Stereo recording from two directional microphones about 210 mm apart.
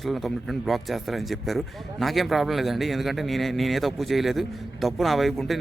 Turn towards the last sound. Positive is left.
turn(degrees=0)  # may be behind; listen again after turning